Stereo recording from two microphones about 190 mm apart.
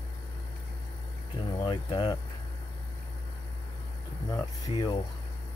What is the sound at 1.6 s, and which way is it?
Speech, 25° left (ahead or behind).